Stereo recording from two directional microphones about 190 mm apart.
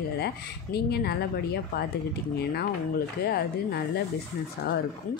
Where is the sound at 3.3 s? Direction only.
55° left (ahead or behind).